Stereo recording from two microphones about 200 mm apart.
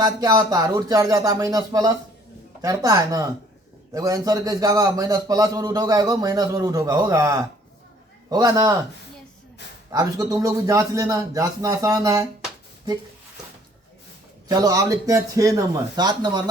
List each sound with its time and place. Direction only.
0.0 s a man's voice: 20° right (ahead or behind)
9.9 s a man's voice: 20° right (ahead or behind)
14.4 s a man's voice: 20° right (ahead or behind)